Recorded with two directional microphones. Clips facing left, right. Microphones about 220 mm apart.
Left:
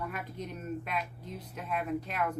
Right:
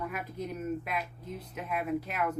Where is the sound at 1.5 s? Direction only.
5° right (ahead or behind).